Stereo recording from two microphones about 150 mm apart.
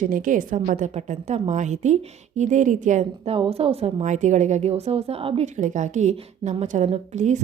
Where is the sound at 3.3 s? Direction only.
40° right (ahead or behind).